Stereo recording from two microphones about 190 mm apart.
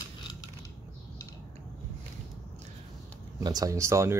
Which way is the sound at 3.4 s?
20° right (ahead or behind).